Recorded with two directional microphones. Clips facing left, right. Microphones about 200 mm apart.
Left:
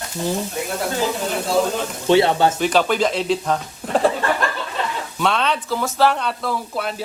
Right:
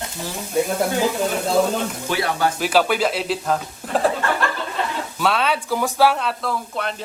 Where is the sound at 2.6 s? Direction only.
5° right (ahead or behind).